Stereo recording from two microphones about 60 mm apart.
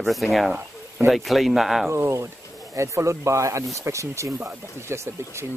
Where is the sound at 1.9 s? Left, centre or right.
Right.